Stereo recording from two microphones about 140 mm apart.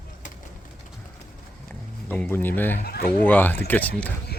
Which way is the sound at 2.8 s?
90° left.